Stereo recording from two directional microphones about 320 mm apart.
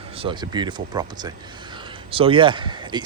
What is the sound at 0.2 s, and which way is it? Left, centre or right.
Speech, centre.